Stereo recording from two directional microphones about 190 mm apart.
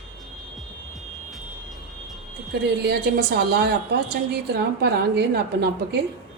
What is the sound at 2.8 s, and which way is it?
A woman's voice, 60° right (ahead or behind).